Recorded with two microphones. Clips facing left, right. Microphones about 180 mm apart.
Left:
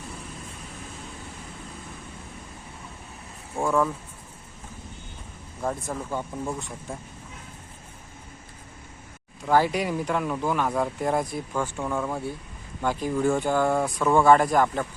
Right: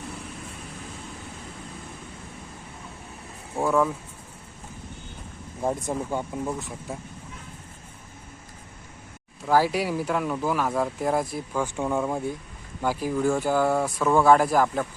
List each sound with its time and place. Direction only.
3.6 s speech: 5° right (ahead or behind)
5.6 s speech: 20° right (ahead or behind)
9.5 s speech: 5° right (ahead or behind)
11.6 s speech: 15° right (ahead or behind)